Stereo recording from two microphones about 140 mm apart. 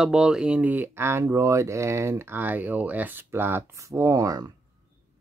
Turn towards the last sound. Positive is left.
turn(degrees=-25)  # may be behind; listen again after turning